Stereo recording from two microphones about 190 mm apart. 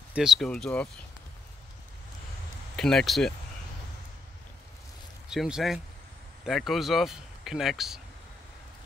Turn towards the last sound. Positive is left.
turn(degrees=0)  # may be behind; listen again after turning